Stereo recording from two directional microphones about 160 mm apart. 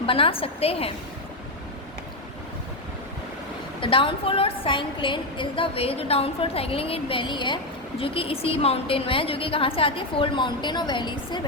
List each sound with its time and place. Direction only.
0.0 s a woman's voice: 35° left (ahead or behind)
3.8 s a woman's voice: 35° left (ahead or behind)